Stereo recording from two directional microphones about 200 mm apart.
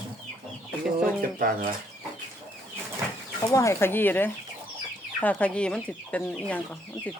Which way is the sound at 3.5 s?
15° left (ahead or behind).